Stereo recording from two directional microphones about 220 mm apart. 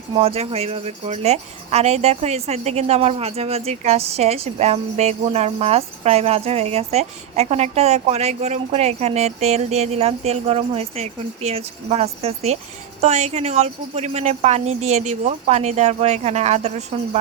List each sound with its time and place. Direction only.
0.1 s a woman's voice: 25° right (ahead or behind)